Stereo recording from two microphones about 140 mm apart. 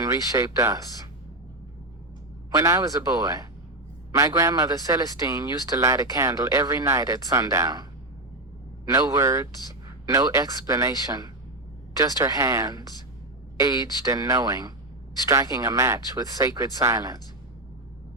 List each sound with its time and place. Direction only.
0.0 s speech: 25° right (ahead or behind)
2.5 s speech: 25° right (ahead or behind)
8.9 s speech: 25° right (ahead or behind)